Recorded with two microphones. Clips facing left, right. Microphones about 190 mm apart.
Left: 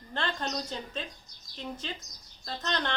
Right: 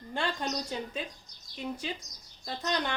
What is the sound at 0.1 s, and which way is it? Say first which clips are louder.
Speech: right 1 dB; 10° right (ahead or behind).